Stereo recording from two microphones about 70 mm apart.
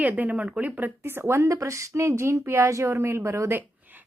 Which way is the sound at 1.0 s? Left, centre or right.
Right.